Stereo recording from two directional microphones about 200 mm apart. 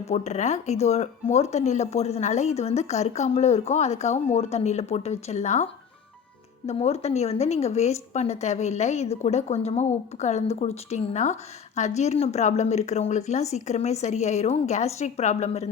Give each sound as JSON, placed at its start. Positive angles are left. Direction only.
{"t": 0.1, "sound": "speech", "side_deg": 35}
{"t": 6.7, "sound": "speech", "side_deg": 30}